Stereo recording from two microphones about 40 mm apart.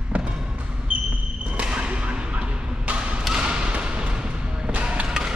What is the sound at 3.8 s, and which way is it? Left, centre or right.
Music, right.